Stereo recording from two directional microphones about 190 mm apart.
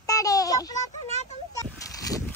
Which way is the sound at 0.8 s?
35° left (ahead or behind).